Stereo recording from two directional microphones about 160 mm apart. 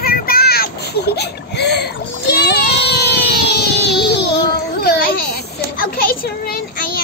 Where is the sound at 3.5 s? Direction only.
90° left.